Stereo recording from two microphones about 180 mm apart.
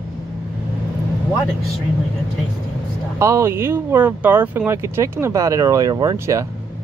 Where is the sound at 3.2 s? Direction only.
15° right (ahead or behind).